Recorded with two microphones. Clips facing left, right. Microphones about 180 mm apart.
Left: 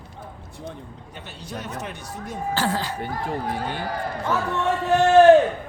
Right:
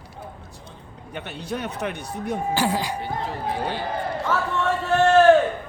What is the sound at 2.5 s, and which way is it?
Speech, 15° right (ahead or behind).